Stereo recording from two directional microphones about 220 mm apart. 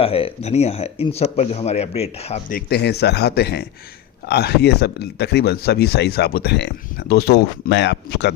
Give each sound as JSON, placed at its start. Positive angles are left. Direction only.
{"t": 0.0, "sound": "speech", "side_deg": 25}
{"t": 2.6, "sound": "speech", "side_deg": 45}